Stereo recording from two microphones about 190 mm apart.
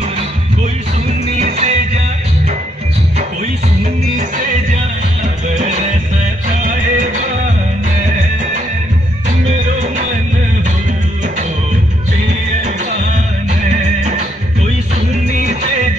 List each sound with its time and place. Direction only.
1.4 s music: 35° right (ahead or behind)
5.5 s music: 40° right (ahead or behind)
9.5 s music: 40° right (ahead or behind)
15.2 s music: 40° right (ahead or behind)